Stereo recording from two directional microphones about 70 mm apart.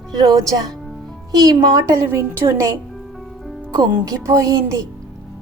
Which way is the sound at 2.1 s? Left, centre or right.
Right.